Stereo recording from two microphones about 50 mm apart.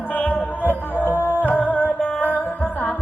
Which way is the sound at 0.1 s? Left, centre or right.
Left.